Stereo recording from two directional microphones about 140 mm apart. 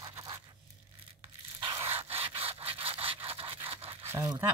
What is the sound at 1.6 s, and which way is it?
Dog, 45° right (ahead or behind).